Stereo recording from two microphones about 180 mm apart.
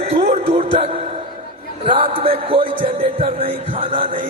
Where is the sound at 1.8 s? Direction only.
30° right (ahead or behind).